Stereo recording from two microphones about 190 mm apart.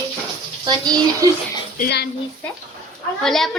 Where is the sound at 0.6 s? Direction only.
20° right (ahead or behind).